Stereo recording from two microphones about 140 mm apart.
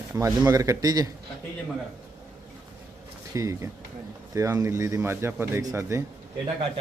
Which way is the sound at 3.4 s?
25° right (ahead or behind).